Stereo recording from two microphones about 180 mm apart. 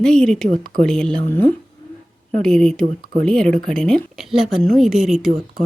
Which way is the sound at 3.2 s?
5° left (ahead or behind).